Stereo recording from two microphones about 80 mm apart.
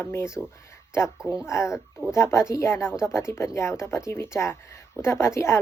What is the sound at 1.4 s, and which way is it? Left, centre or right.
Speech, left.